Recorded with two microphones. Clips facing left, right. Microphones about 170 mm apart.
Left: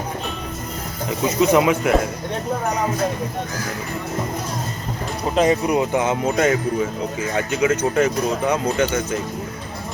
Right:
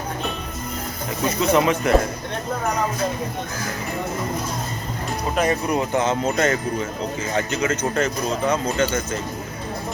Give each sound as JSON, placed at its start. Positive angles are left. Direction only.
{"t": 1.2, "sound": "speech", "side_deg": 15}
{"t": 5.3, "sound": "speech", "side_deg": 20}